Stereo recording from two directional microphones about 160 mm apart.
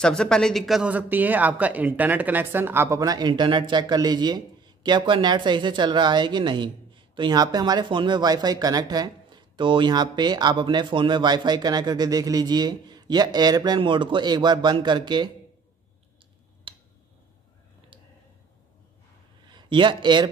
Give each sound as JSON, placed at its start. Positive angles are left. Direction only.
{"t": 0.0, "sound": "speech", "side_deg": 5}
{"t": 16.7, "sound": "a sound", "side_deg": -30}
{"t": 19.4, "sound": "speech", "side_deg": -30}